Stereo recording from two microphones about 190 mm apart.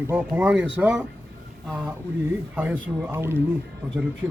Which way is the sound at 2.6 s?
10° right (ahead or behind).